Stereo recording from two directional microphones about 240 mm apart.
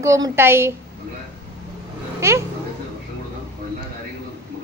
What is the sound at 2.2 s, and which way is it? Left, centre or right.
Speech, centre.